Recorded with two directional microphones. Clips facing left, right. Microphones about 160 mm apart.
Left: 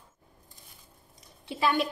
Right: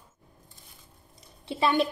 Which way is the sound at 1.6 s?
25° right (ahead or behind).